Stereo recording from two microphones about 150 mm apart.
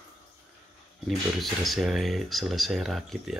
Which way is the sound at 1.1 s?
Centre (ahead or behind).